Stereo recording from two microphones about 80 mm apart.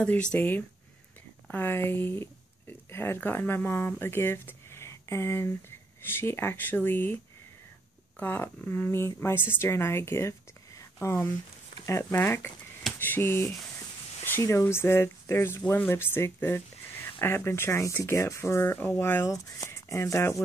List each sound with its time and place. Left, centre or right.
0.0 s speech: centre
8.2 s speech: left